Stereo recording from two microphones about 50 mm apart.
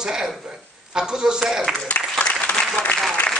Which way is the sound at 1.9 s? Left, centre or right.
Left.